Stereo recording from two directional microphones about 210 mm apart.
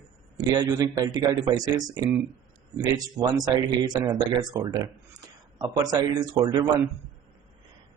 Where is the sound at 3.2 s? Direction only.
20° right (ahead or behind).